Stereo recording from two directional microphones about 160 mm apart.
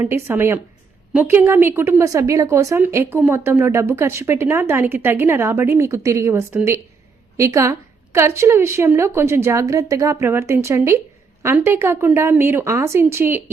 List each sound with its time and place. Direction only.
0.0 s a woman's voice: 15° right (ahead or behind)